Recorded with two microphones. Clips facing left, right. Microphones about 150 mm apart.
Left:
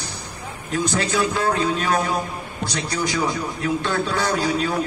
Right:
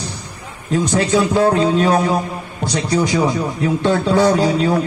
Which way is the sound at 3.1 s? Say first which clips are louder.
Right 6 dB; 25° right (ahead or behind).